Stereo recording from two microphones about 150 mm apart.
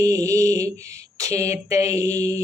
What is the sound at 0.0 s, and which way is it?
Mantra, 20° right (ahead or behind).